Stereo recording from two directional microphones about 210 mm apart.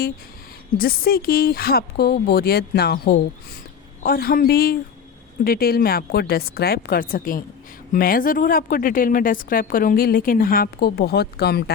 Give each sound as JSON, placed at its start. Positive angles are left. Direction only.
{"t": 0.8, "sound": "a woman's voice", "side_deg": 45}